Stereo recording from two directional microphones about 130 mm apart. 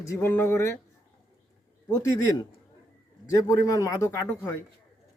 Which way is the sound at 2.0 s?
25° left (ahead or behind).